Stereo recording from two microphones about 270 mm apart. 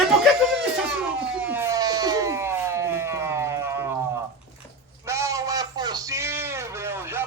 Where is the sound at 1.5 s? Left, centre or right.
Centre.